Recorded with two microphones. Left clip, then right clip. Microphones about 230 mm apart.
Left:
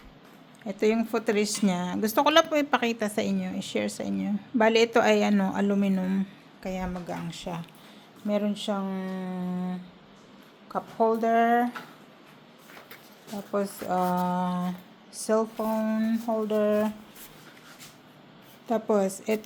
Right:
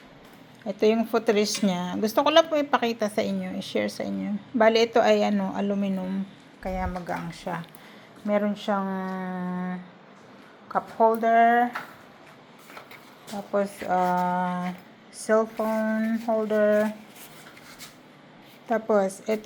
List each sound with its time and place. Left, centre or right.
0.6 s speech: centre
13.3 s speech: centre
18.7 s speech: left